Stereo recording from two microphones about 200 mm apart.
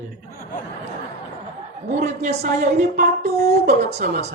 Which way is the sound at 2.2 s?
35° right (ahead or behind).